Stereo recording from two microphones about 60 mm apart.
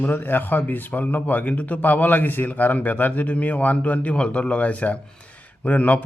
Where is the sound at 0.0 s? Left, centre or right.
Left.